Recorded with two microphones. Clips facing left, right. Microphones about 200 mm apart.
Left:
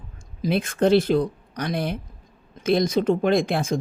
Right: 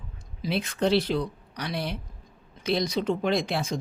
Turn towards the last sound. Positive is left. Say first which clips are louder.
# left 5 dB
turn(degrees=50)  # may be behind; listen again after turning